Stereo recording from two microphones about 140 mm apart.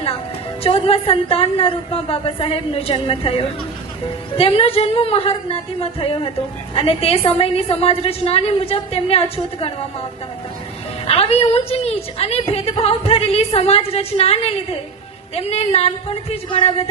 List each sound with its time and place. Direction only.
0.6 s a woman's voice: 45° left (ahead or behind)
11.0 s a woman's voice: 45° left (ahead or behind)